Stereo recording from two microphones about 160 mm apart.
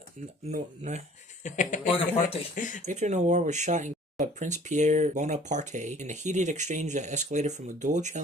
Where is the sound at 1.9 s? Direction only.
35° left (ahead or behind).